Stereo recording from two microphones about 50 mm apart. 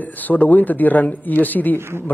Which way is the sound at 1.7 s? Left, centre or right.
Right.